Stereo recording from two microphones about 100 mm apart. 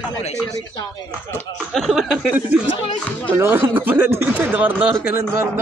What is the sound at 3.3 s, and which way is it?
Speech, 25° right (ahead or behind).